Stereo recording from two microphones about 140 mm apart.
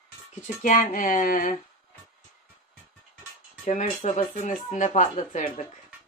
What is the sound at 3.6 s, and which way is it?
Speech, 60° left (ahead or behind).